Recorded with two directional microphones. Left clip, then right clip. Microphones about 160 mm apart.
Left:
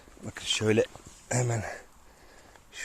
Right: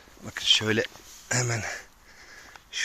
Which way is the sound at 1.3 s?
15° left (ahead or behind).